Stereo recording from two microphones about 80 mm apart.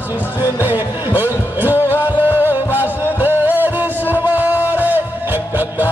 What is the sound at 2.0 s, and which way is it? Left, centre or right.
Music, right.